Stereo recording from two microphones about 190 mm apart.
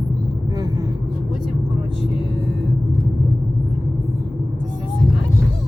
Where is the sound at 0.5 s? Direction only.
20° right (ahead or behind).